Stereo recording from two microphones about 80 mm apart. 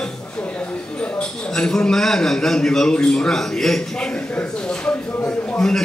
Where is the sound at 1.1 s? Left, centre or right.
Centre.